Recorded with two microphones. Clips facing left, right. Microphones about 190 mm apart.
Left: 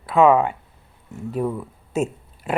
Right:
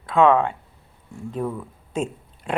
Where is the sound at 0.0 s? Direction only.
5° left (ahead or behind).